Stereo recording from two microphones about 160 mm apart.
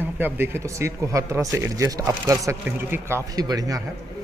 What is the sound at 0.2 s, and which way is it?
Speech, 15° right (ahead or behind).